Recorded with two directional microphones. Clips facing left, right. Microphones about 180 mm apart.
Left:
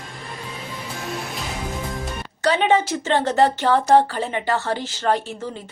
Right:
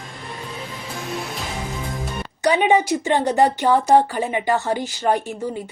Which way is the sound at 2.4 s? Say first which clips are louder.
Right 1 dB; 15° right (ahead or behind).